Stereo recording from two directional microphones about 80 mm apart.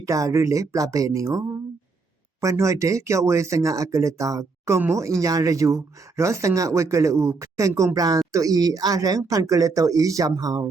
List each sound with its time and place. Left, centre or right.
0.0 s speech: right